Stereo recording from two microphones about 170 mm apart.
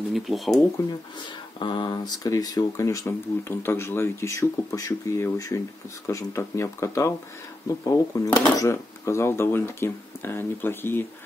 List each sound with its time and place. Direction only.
0.1 s speech: centre (ahead or behind)
1.6 s speech: 30° left (ahead or behind); by 11.1 s 15° left (ahead or behind)